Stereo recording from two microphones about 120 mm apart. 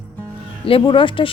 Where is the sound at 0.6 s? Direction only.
50° left (ahead or behind).